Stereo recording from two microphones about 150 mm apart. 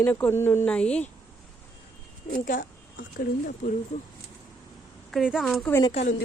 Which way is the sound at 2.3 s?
80° left.